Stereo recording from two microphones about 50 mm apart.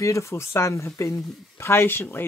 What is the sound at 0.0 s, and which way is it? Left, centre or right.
Speech, left.